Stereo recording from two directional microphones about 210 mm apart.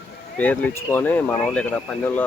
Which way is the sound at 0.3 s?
5° left (ahead or behind).